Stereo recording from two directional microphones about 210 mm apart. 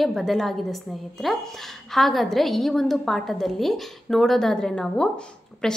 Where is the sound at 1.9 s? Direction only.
Centre (ahead or behind).